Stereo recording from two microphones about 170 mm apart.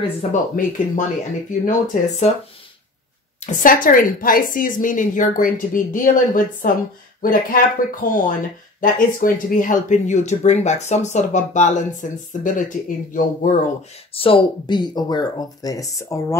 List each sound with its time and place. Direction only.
0.3 s speech: 45° left (ahead or behind)
3.3 s speech: 50° left (ahead or behind)
14.1 s speech: 30° left (ahead or behind)